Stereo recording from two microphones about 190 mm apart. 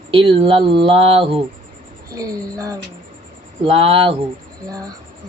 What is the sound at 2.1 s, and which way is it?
Speech, 15° right (ahead or behind).